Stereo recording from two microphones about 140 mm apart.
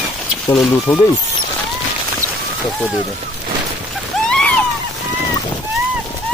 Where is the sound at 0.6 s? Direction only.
20° left (ahead or behind).